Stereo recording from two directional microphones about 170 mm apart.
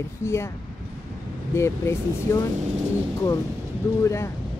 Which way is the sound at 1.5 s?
15° left (ahead or behind).